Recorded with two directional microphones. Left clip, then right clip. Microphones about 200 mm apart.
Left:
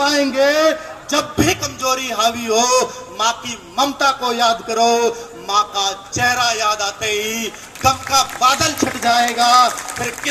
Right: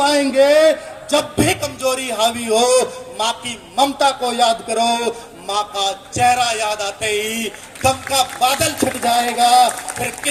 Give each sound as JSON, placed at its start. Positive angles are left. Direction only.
{"t": 0.0, "sound": "a man's voice", "side_deg": -55}